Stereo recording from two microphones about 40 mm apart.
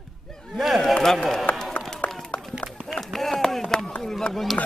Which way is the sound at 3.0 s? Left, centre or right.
Centre.